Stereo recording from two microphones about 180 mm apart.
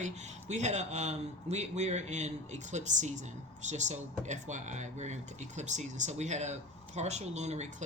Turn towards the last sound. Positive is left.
turn(degrees=-40)  # may be behind; listen again after turning